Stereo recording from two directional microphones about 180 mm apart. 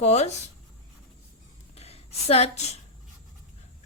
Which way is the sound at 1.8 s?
35° left (ahead or behind).